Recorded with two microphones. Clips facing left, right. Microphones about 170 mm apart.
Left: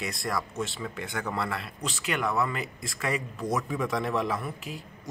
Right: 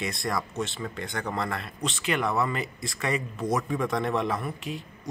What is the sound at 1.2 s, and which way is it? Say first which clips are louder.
Speech: right 1 dB; 35° right (ahead or behind).